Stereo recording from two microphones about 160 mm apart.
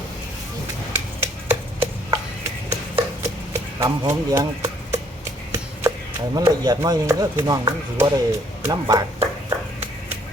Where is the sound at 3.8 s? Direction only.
20° right (ahead or behind).